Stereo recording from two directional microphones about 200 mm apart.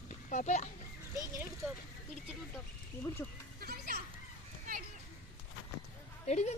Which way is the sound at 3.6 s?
50° right (ahead or behind).